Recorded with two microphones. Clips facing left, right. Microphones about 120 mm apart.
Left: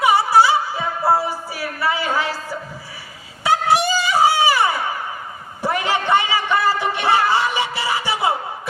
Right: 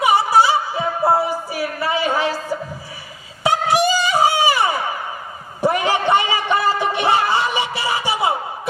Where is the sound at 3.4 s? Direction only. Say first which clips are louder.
Even; 15° right (ahead or behind).